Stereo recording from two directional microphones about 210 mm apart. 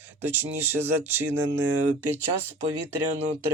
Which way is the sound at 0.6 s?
10° right (ahead or behind).